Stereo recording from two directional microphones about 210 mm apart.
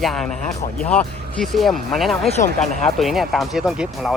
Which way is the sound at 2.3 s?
35° left (ahead or behind).